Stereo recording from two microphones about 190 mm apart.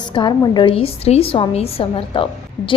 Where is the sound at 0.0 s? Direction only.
25° left (ahead or behind).